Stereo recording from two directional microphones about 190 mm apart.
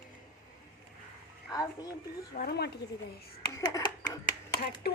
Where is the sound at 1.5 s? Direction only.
20° left (ahead or behind).